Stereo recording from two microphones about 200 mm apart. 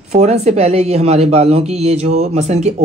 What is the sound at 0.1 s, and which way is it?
Speech, 35° right (ahead or behind).